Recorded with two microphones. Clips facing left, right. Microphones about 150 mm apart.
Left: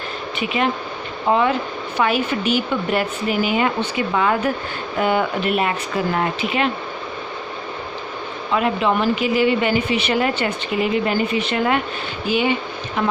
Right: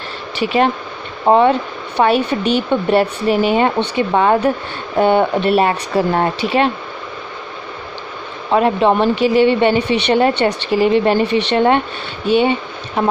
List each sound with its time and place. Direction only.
0.4 s speech: 35° right (ahead or behind)
8.5 s a woman's voice: 35° right (ahead or behind)